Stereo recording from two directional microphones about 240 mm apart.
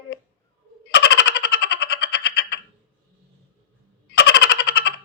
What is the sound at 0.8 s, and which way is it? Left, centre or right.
Boing, left.